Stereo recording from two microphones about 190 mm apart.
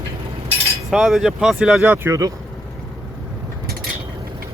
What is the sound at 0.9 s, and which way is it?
Speech, centre (ahead or behind).